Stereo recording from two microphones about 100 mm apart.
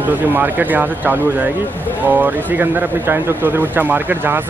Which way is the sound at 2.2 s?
20° right (ahead or behind).